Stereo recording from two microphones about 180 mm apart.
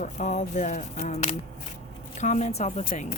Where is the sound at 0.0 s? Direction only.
40° left (ahead or behind).